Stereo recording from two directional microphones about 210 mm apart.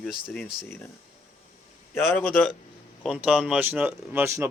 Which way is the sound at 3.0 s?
5° right (ahead or behind).